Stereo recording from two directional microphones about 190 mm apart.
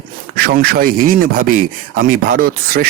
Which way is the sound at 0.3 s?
55° right (ahead or behind).